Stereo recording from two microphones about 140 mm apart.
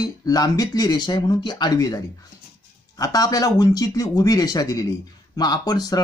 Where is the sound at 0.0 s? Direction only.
25° left (ahead or behind).